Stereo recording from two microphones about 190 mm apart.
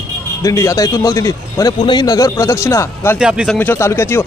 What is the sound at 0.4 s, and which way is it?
A man's voice, 15° left (ahead or behind).